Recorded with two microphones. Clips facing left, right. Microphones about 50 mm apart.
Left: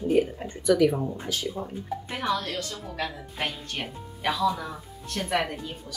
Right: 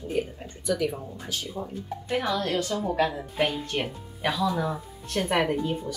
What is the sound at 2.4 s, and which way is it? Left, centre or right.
Speech, right.